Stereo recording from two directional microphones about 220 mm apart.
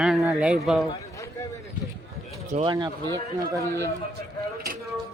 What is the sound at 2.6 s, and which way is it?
Speech, 20° right (ahead or behind).